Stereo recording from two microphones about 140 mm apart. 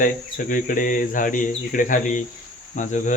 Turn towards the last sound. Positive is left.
turn(degrees=60)  # may be behind; listen again after turning